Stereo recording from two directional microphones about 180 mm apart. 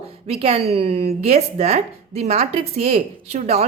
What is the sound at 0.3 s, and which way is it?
Speech, 35° right (ahead or behind).